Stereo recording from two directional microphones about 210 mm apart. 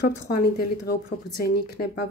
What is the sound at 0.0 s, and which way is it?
Speech, 50° left (ahead or behind).